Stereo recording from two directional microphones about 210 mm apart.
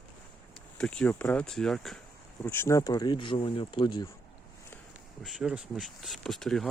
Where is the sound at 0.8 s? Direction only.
5° left (ahead or behind); by 4.1 s 20° left (ahead or behind).